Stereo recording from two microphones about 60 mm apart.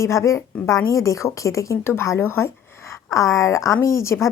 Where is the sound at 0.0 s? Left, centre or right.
Left.